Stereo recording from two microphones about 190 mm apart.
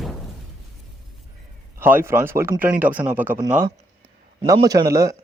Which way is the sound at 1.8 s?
10° right (ahead or behind).